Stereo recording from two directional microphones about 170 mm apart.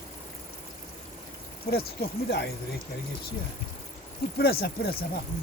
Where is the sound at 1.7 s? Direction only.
70° left (ahead or behind).